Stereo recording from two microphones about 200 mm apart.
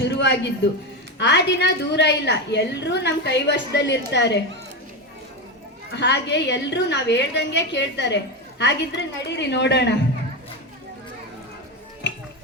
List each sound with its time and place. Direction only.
0.0 s a sound: 60° left (ahead or behind)
1.2 s a woman's voice: 60° left (ahead or behind)
5.9 s a woman's voice: 60° left (ahead or behind)
12.0 s music: 65° left (ahead or behind)